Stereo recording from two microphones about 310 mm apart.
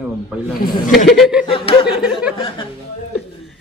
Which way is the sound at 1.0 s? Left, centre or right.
Centre.